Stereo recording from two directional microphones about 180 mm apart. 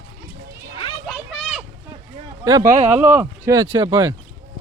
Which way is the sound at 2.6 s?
45° right (ahead or behind).